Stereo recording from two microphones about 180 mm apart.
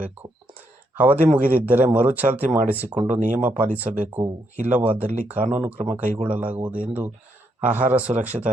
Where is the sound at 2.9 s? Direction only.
30° right (ahead or behind).